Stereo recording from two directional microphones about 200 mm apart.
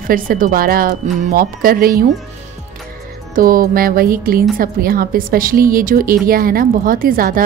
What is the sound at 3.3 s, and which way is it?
A woman's voice, 45° right (ahead or behind).